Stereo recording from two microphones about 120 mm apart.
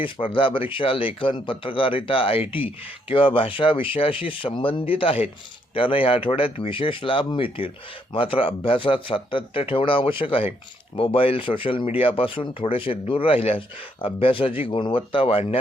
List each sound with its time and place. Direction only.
0.0 s speech: 45° left (ahead or behind)